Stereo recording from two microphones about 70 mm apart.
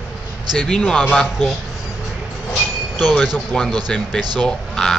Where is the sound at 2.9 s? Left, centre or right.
Centre.